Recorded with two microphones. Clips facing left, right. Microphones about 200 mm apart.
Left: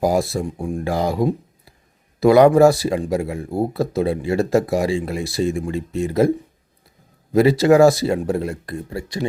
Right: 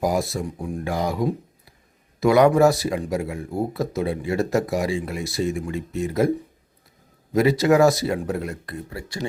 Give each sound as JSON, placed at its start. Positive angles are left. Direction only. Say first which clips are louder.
{"t": 0.0, "sound": "speech", "louder": "left 4 dB", "side_deg": 30}
{"t": 7.3, "sound": "speech", "louder": "left 4 dB", "side_deg": 30}